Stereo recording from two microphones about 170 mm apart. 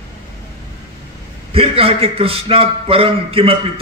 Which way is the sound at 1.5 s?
35° right (ahead or behind).